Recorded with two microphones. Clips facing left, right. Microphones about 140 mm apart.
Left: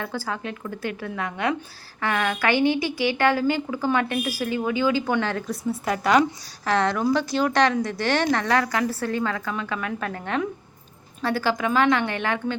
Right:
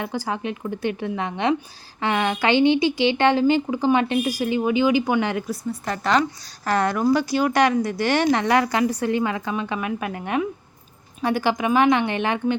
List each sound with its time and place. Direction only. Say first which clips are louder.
0.0 s a woman's voice: right 3 dB; 15° right (ahead or behind)
5.5 s speech: left 1 dB; 5° left (ahead or behind)
6.7 s a woman's voice: right 2 dB; 5° right (ahead or behind)